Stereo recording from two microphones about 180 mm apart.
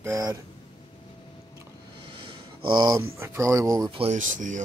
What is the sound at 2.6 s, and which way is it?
Speech, 25° right (ahead or behind).